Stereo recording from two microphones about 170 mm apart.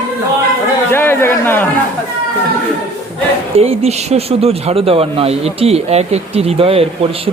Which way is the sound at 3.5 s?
35° right (ahead or behind).